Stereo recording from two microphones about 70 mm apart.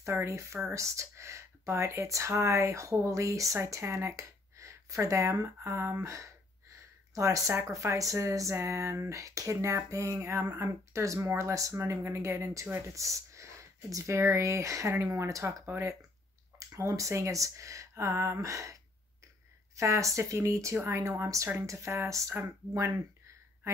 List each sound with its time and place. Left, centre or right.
0.0 s speech: right
3.5 s speech: right
10.1 s speech: right
15.4 s speech: right
19.8 s speech: right